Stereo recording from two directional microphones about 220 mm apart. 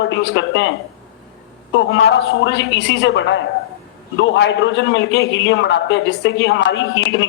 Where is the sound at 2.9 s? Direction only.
50° left (ahead or behind).